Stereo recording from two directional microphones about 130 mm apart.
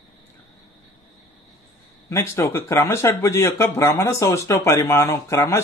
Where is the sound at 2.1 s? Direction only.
20° left (ahead or behind).